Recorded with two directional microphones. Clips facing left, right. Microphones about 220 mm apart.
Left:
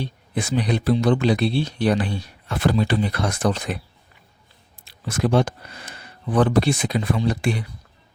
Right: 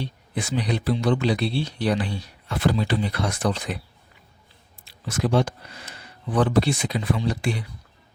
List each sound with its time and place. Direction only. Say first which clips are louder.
0.3 s speech: left 3 dB; 50° left (ahead or behind)
4.9 s speech: left 3 dB; 55° left (ahead or behind)